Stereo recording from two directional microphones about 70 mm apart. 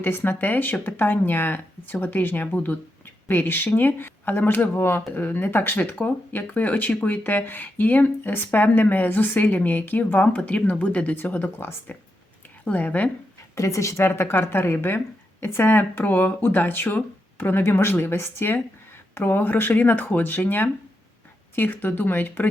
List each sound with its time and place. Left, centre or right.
0.0 s speech: left
13.6 s speech: left